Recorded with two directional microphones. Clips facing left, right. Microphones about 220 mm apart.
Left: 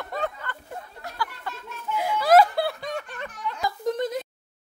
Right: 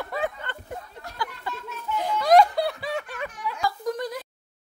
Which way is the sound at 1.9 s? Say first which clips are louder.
Even; 10° left (ahead or behind).